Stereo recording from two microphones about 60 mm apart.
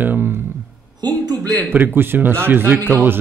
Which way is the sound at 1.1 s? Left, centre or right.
Right.